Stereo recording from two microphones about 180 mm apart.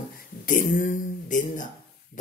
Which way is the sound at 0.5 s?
50° left (ahead or behind).